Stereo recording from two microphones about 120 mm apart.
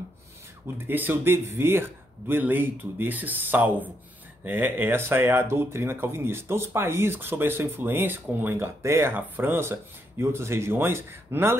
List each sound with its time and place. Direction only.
0.7 s a man's voice: 15° right (ahead or behind)